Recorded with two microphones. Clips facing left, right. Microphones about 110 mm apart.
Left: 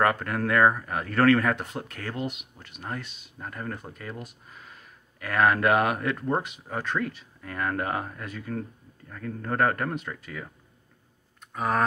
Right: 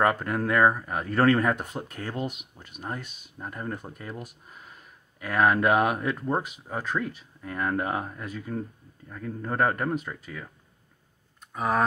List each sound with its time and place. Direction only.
0.0 s speech: 10° right (ahead or behind)
1.0 s speech: 15° right (ahead or behind)
5.2 s speech: 5° right (ahead or behind)
11.5 s speech: 5° right (ahead or behind)